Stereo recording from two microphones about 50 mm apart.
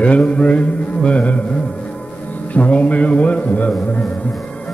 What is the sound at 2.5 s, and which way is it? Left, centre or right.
Mantra, left.